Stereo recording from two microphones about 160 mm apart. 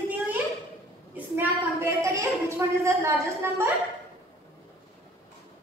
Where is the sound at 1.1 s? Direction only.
10° right (ahead or behind).